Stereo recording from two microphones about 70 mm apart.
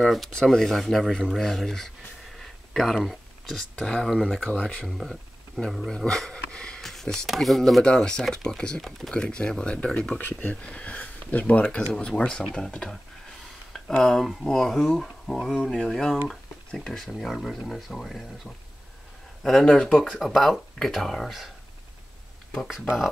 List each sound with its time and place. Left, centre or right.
0.0 s speech: centre
2.3 s a sound: centre
3.8 s speech: centre
4.4 s speech: centre
4.8 s speech: centre
22.5 s speech: centre